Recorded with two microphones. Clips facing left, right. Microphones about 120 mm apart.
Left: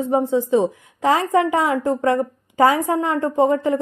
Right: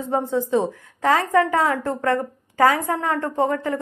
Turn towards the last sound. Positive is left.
turn(degrees=20)  # may be behind; listen again after turning